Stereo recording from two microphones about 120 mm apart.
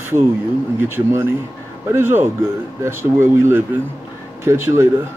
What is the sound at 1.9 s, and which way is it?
Speech, 20° right (ahead or behind).